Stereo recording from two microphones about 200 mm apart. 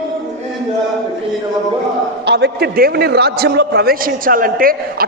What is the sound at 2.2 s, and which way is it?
A man's voice, 55° right (ahead or behind).